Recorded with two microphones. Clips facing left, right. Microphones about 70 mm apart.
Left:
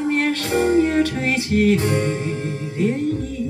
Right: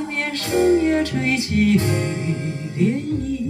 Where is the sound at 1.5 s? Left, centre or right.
Left.